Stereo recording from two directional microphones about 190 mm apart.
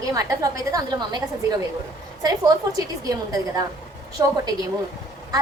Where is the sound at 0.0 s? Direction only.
15° right (ahead or behind).